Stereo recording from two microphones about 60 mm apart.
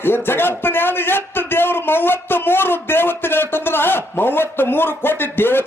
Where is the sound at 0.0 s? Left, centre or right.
Left.